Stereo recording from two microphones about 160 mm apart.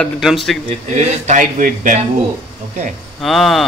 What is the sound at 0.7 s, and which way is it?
Speech, 45° right (ahead or behind).